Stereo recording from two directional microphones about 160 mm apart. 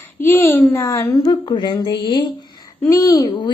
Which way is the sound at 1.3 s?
30° left (ahead or behind).